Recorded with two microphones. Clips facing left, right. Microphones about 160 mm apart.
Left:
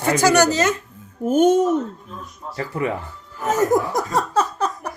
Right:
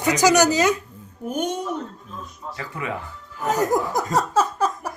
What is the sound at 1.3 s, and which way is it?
Speech, 45° left (ahead or behind).